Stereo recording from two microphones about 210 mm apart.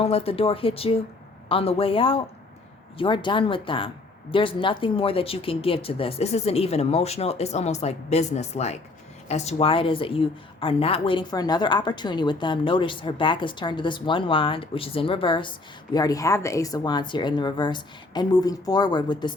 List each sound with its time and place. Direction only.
0.0 s speech: 30° left (ahead or behind)